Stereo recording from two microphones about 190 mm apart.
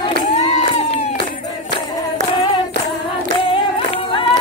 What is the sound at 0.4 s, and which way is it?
Crowd, 30° left (ahead or behind).